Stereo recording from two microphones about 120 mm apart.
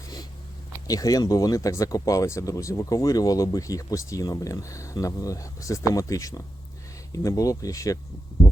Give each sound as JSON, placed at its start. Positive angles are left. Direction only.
{"t": 0.9, "sound": "speech", "side_deg": 30}